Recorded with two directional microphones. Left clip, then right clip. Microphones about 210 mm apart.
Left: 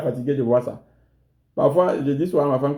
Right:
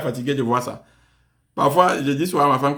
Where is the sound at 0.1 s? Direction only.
35° right (ahead or behind).